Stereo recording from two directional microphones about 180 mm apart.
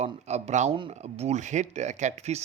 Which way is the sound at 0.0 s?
40° right (ahead or behind).